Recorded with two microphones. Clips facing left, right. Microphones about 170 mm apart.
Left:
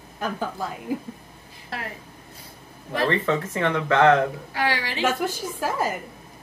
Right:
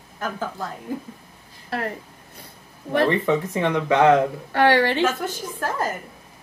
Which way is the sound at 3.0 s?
15° right (ahead or behind).